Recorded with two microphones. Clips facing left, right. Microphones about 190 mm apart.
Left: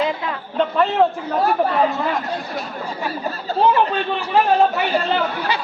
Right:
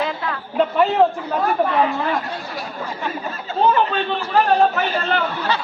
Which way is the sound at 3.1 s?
35° left (ahead or behind).